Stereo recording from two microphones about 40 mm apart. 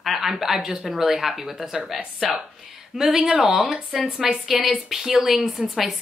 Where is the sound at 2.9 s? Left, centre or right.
Right.